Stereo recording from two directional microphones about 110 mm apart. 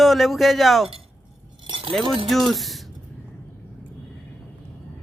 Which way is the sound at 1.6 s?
50° right (ahead or behind).